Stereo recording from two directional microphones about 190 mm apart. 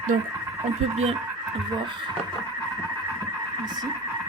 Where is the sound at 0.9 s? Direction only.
35° right (ahead or behind).